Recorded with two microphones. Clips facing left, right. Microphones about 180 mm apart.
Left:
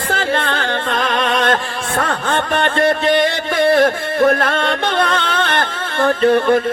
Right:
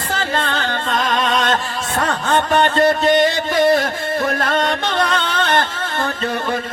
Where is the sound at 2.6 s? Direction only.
50° left (ahead or behind).